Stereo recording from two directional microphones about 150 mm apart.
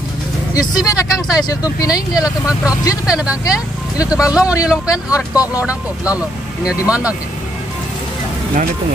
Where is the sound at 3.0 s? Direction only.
5° right (ahead or behind).